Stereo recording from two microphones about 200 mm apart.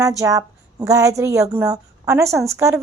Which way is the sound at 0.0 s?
15° right (ahead or behind).